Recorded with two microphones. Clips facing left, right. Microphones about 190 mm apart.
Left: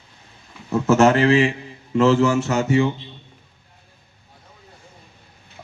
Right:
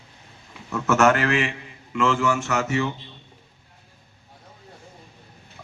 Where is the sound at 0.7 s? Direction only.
30° left (ahead or behind).